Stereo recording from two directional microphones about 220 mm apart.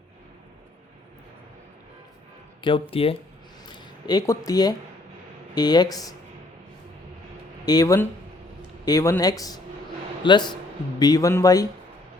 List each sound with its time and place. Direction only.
2.6 s speech: 20° left (ahead or behind)
7.6 s speech: 15° left (ahead or behind)